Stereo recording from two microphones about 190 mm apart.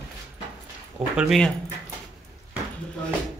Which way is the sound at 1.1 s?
Centre (ahead or behind).